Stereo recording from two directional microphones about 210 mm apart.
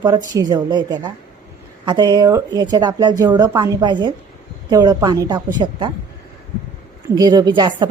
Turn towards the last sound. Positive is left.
turn(degrees=-20)  # may be behind; listen again after turning